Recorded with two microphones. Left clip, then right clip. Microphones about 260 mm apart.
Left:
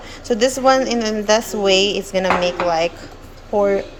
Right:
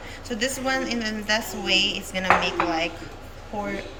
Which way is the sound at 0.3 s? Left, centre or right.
Centre.